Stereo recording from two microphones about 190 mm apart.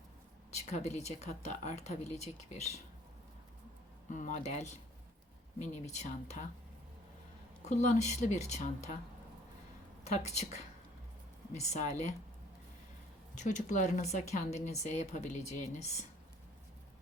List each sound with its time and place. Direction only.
0.5 s speech: 35° left (ahead or behind)
4.1 s speech: 40° left (ahead or behind)
7.6 s speech: 40° left (ahead or behind)
10.0 s speech: 35° left (ahead or behind)
13.3 s speech: 40° left (ahead or behind)